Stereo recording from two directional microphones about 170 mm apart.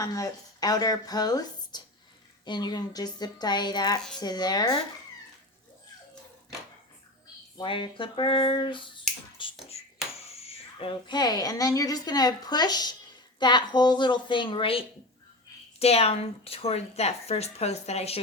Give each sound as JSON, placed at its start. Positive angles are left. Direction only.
{"t": 0.0, "sound": "speech", "side_deg": 20}
{"t": 7.6, "sound": "speech", "side_deg": 30}
{"t": 9.4, "sound": "a sound", "side_deg": 35}
{"t": 10.4, "sound": "a woman's voice", "side_deg": 35}